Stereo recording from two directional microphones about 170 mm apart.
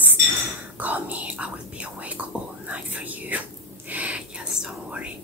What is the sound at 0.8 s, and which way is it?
Speech, 10° right (ahead or behind).